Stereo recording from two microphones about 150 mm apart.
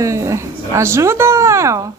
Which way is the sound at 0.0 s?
20° right (ahead or behind).